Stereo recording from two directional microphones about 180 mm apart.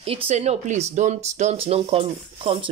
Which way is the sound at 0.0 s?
30° right (ahead or behind).